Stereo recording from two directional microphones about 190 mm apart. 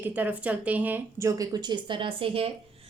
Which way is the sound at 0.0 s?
10° right (ahead or behind).